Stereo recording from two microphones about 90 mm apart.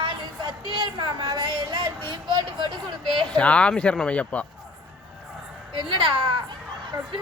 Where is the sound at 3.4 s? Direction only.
15° left (ahead or behind).